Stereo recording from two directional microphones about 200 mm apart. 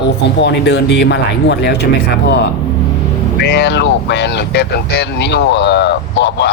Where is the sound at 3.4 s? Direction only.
55° left (ahead or behind).